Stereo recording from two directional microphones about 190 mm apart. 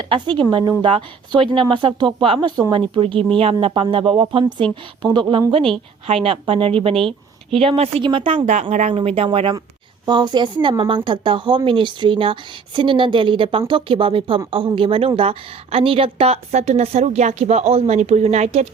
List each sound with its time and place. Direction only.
0.1 s a woman's voice: 25° right (ahead or behind)